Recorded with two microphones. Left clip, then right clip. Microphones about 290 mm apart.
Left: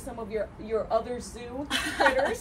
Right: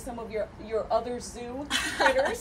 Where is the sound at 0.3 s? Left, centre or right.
Centre.